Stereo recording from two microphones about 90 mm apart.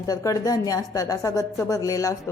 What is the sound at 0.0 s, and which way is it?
A woman's voice, 40° left (ahead or behind).